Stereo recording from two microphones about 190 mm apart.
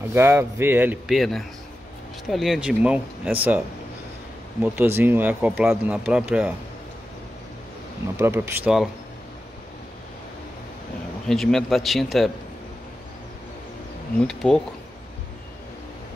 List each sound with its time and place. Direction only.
0.1 s speech: 15° right (ahead or behind)
4.7 s speech: 10° right (ahead or behind)
8.2 s speech: 15° right (ahead or behind)
11.2 s speech: centre (ahead or behind)
14.2 s speech: 5° left (ahead or behind)